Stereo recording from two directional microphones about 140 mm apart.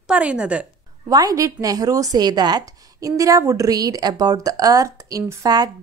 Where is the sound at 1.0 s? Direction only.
25° right (ahead or behind).